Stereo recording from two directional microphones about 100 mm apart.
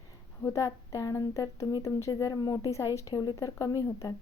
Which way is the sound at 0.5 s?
35° left (ahead or behind).